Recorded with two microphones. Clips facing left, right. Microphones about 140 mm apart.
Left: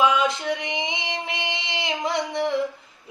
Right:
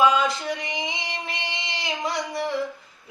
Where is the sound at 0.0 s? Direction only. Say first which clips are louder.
Even; 20° left (ahead or behind).